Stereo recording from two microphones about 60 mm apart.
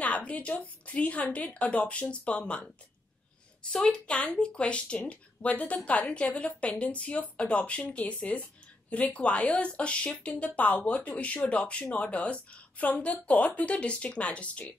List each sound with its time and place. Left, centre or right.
0.0 s speech: left
3.7 s speech: centre